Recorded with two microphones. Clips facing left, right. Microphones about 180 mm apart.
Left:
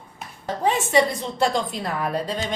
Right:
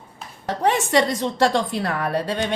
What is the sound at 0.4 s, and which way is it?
A woman's voice, 75° right (ahead or behind).